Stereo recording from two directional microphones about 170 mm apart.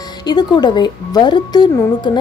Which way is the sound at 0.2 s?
25° left (ahead or behind).